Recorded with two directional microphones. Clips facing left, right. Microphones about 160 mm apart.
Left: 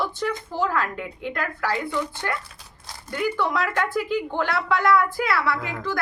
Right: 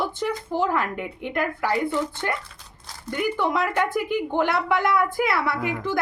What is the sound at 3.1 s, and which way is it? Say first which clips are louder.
A woman's voice: right 1 dB; 20° right (ahead or behind).